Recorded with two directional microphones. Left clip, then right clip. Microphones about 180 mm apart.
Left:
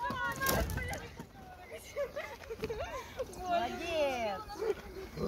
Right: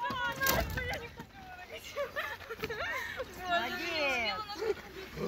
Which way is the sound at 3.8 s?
55° left (ahead or behind).